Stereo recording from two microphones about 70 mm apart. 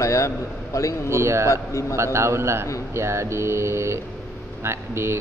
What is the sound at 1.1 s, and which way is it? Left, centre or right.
Speech, right.